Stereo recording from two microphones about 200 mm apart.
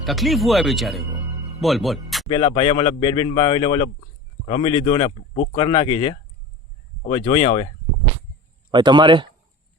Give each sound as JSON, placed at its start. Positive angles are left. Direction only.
{"t": 0.0, "sound": "speech", "side_deg": 0}
{"t": 2.3, "sound": "speech", "side_deg": 25}
{"t": 8.7, "sound": "a man's voice", "side_deg": -20}